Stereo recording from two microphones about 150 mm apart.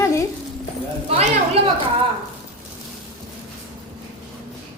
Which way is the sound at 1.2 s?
40° right (ahead or behind).